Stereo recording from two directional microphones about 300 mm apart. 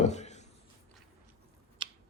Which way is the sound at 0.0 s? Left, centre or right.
Left.